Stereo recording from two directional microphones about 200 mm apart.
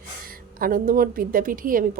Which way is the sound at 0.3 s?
45° right (ahead or behind).